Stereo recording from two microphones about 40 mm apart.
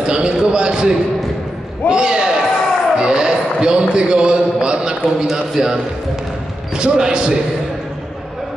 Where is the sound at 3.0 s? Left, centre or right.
Right.